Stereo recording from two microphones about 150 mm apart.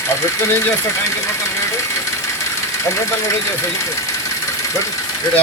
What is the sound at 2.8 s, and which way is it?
Speech, 20° left (ahead or behind).